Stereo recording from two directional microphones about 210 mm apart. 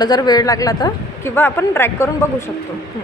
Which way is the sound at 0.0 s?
20° left (ahead or behind).